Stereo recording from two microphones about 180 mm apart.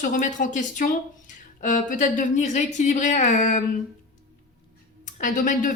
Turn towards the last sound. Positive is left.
turn(degrees=45)  # may be behind; listen again after turning